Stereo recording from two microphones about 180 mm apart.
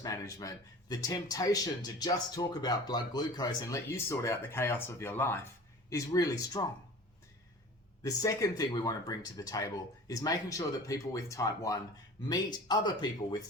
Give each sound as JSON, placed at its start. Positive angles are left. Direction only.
{"t": 0.0, "sound": "speech", "side_deg": 20}
{"t": 8.0, "sound": "speech", "side_deg": 20}